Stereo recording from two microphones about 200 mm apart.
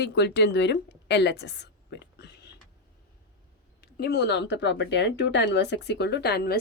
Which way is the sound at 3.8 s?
55° left (ahead or behind).